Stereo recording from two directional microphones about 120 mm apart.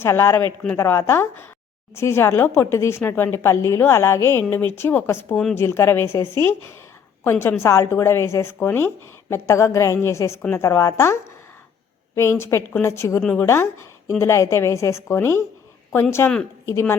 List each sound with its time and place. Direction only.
0.0 s a woman's voice: 20° left (ahead or behind)